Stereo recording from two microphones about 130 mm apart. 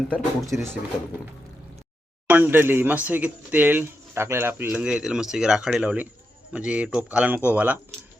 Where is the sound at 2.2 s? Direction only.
15° right (ahead or behind).